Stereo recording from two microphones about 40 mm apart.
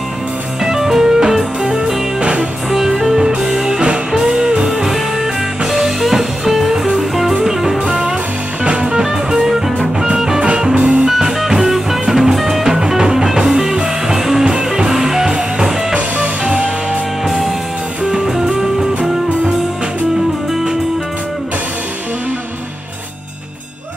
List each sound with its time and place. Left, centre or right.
0.6 s music: centre
2.1 s music: right
2.7 s music: centre
5.7 s music: centre
7.8 s music: right
10.4 s music: right
11.1 s music: centre
16.4 s music: right
18.1 s music: centre